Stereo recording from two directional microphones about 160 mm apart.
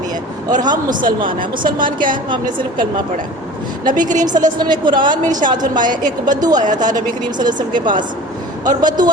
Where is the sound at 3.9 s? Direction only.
55° right (ahead or behind).